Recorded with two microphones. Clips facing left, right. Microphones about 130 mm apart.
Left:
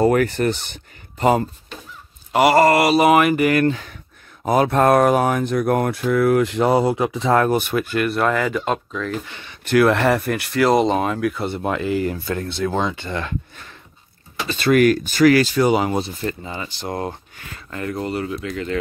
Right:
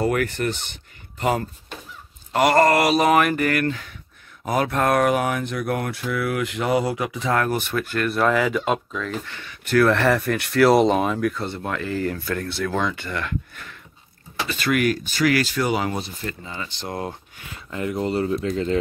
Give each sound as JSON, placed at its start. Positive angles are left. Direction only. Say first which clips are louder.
{"t": 0.0, "sound": "speech", "louder": "left 5 dB", "side_deg": 35}
{"t": 2.3, "sound": "mantra", "louder": "left 3 dB", "side_deg": 5}
{"t": 3.5, "sound": "speech", "louder": "left 5 dB", "side_deg": 25}
{"t": 7.5, "sound": "speech", "louder": "left 4 dB", "side_deg": 15}
{"t": 8.1, "sound": "mantra", "louder": "right 3 dB", "side_deg": 0}
{"t": 9.2, "sound": "speech", "louder": "even", "side_deg": 20}
{"t": 14.8, "sound": "speech", "louder": "left 9 dB", "side_deg": 45}
{"t": 15.3, "sound": "speech", "louder": "left 6 dB", "side_deg": 25}
{"t": 16.5, "sound": "mantra", "louder": "left 3 dB", "side_deg": 5}
{"t": 17.6, "sound": "speech", "louder": "even", "side_deg": -20}
{"t": 18.0, "sound": "speech", "louder": "right 6 dB", "side_deg": -30}